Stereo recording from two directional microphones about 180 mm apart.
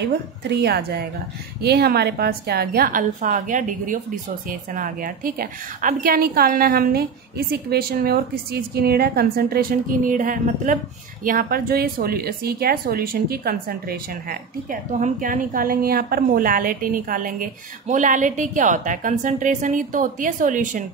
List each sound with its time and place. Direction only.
0.0 s a woman's voice: 65° right (ahead or behind); by 20.8 s 45° right (ahead or behind)